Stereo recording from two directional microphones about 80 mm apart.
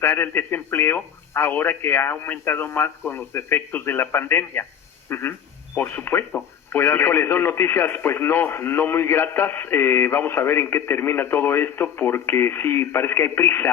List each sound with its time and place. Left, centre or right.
0.0 s speech: left
5.0 s a sound: left
5.7 s speech: left